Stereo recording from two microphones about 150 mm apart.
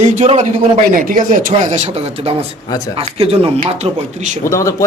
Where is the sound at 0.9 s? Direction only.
65° right (ahead or behind).